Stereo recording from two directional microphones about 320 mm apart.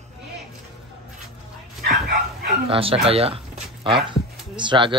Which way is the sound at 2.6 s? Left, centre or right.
Centre.